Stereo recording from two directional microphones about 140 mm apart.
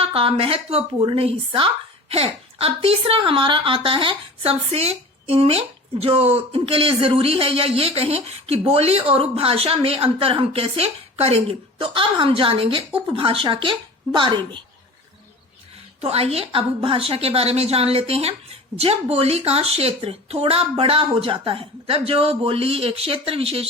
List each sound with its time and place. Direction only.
0.1 s a woman's voice: 40° right (ahead or behind)
16.0 s a woman's voice: 45° right (ahead or behind)